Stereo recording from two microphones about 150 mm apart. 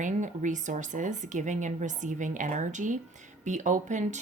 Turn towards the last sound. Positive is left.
turn(degrees=-50)  # may be behind; listen again after turning